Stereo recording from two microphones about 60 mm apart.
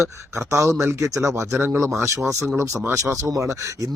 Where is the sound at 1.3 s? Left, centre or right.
Right.